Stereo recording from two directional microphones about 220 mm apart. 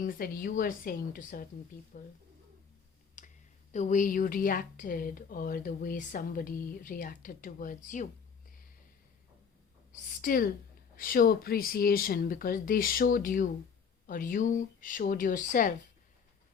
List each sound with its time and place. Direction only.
0.0 s a woman's voice: 40° left (ahead or behind)
3.2 s a sound: 35° left (ahead or behind)
3.7 s a woman's voice: 35° left (ahead or behind)
10.2 s a woman's voice: 40° left (ahead or behind)